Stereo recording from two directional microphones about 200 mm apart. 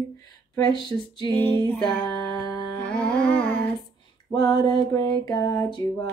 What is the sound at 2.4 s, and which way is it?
Music, 20° left (ahead or behind).